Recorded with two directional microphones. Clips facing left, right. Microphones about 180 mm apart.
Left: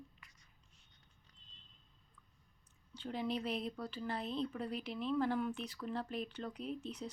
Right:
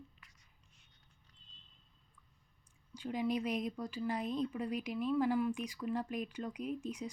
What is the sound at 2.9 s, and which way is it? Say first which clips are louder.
Speech: right 4 dB; 10° right (ahead or behind).